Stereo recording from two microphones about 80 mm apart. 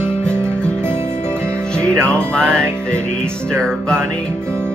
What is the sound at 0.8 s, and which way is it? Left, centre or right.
Music, right.